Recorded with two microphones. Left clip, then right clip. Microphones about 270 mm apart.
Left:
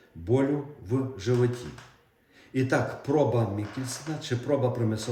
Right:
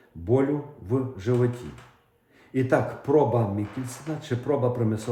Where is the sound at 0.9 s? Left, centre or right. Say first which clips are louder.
Right 2 dB; centre.